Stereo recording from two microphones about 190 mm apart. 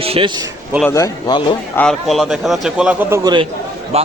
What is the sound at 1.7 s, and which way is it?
Speech, 5° left (ahead or behind).